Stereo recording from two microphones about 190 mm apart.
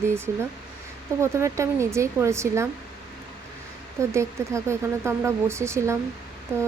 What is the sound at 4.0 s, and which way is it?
Speech, 15° right (ahead or behind).